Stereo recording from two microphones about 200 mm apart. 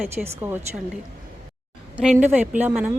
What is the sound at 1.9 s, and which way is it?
Speech, 5° right (ahead or behind).